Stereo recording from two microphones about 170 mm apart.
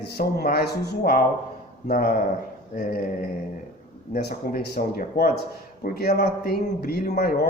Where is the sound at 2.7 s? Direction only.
50° left (ahead or behind).